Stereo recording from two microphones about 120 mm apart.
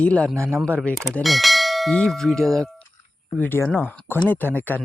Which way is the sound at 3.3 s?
15° left (ahead or behind).